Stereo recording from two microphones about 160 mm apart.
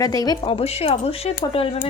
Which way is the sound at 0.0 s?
25° left (ahead or behind).